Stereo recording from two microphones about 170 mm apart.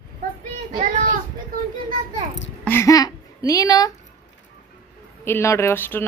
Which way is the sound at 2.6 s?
15° left (ahead or behind).